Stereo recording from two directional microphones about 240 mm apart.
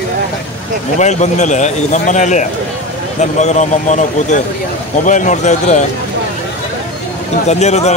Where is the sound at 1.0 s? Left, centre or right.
Left.